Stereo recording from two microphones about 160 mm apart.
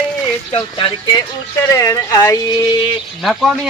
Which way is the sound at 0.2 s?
30° left (ahead or behind).